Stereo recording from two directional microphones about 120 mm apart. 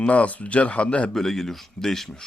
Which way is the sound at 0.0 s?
10° left (ahead or behind).